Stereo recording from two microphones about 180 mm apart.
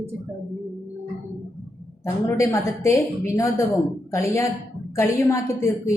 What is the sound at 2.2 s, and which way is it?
A woman's voice, 15° left (ahead or behind).